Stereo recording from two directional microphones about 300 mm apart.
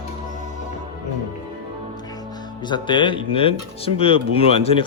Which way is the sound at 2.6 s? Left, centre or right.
Centre.